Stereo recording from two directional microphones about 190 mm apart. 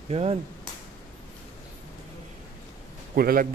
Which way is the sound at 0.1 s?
35° right (ahead or behind).